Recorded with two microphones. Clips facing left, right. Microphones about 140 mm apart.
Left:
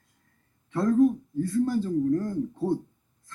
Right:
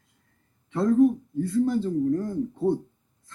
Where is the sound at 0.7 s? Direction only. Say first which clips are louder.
Right 2 dB; 25° right (ahead or behind).